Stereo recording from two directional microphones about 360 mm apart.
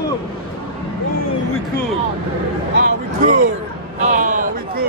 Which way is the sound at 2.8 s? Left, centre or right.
Centre.